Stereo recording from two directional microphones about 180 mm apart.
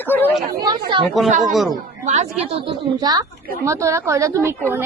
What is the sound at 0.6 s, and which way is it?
Speech, 25° right (ahead or behind).